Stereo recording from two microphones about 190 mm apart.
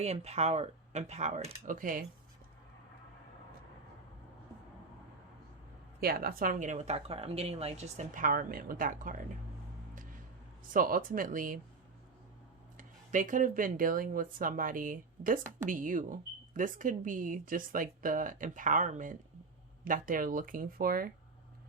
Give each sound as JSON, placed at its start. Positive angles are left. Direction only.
{"t": 0.0, "sound": "speech", "side_deg": -35}
{"t": 6.0, "sound": "speech", "side_deg": -50}
{"t": 10.7, "sound": "speech", "side_deg": -45}
{"t": 12.7, "sound": "speech", "side_deg": -45}